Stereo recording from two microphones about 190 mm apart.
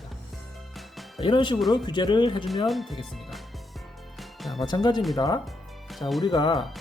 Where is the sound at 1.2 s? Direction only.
25° left (ahead or behind).